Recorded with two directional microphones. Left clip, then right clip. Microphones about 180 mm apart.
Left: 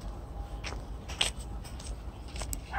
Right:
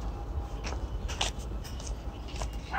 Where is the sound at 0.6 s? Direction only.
15° left (ahead or behind).